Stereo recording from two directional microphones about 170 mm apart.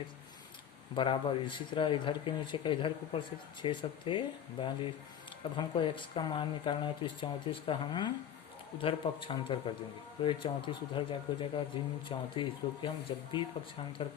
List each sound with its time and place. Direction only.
0.9 s speech: 30° left (ahead or behind)